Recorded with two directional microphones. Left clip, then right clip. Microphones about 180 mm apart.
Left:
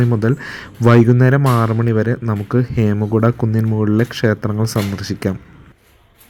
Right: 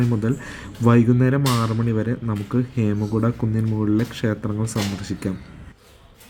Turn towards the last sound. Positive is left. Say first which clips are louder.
# left 6 dB
turn(degrees=30)  # may be behind; listen again after turning